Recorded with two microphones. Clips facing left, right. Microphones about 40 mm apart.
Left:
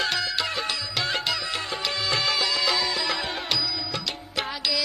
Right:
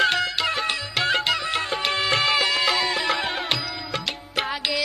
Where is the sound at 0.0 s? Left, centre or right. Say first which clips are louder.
Right 5 dB; right.